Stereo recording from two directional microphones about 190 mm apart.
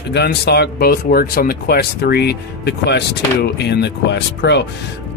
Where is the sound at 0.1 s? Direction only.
60° left (ahead or behind).